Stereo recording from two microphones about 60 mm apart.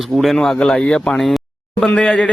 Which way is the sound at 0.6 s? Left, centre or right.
Centre.